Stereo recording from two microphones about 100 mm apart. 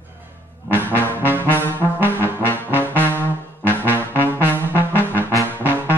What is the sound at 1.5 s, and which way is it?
Brass instrument, 20° left (ahead or behind).